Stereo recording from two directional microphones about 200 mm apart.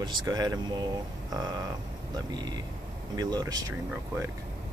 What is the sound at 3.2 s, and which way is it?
Speech, 20° right (ahead or behind).